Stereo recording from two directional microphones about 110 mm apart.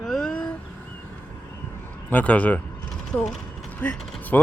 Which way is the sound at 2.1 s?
10° left (ahead or behind).